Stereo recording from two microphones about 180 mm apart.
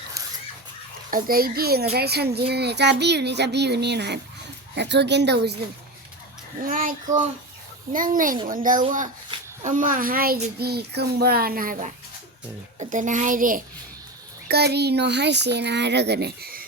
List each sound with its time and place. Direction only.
1.1 s a child's voice: 55° right (ahead or behind)
6.7 s a woman's voice: 50° right (ahead or behind)
14.4 s a child's voice: 65° right (ahead or behind)